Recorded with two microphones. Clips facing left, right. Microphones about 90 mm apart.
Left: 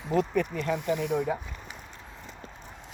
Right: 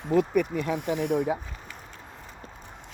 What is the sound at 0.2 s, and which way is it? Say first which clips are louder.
Speech: right 2 dB; 15° right (ahead or behind).